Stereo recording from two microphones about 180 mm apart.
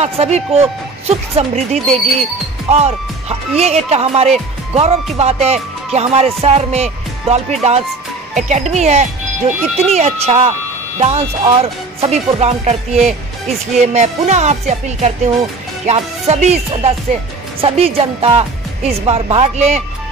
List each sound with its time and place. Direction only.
0.0 s speech: 35° right (ahead or behind)
8.4 s speech: 40° right (ahead or behind)